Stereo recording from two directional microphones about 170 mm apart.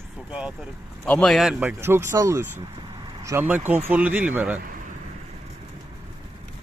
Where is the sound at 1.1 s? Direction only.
5° left (ahead or behind).